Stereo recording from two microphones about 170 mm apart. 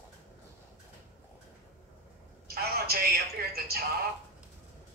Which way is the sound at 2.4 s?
65° right (ahead or behind).